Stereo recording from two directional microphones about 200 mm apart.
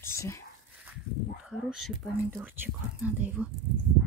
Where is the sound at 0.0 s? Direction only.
15° left (ahead or behind).